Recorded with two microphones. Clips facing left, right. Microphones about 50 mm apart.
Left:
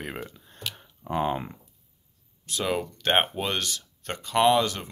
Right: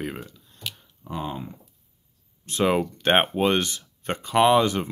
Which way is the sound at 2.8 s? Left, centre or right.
Centre.